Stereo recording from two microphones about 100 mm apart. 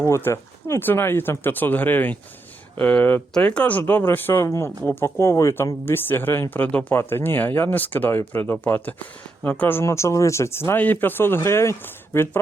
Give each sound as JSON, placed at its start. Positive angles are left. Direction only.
{"t": 0.1, "sound": "speech", "side_deg": 25}